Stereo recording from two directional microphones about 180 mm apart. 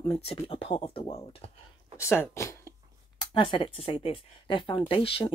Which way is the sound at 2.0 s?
15° left (ahead or behind).